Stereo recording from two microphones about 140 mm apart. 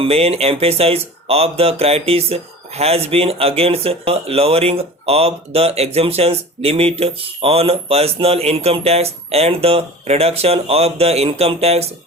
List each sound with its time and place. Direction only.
0.0 s speech: 45° right (ahead or behind)